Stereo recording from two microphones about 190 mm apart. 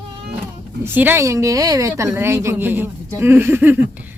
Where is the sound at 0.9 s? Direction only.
10° right (ahead or behind).